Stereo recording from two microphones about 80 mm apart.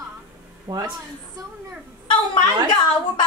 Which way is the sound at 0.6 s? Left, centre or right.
Right.